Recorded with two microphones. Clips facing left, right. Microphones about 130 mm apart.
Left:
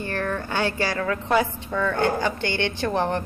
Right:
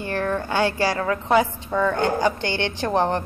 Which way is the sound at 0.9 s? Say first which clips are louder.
Right 1 dB; 25° right (ahead or behind).